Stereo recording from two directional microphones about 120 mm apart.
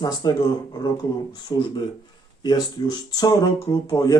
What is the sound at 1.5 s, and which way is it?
Speech, 35° left (ahead or behind).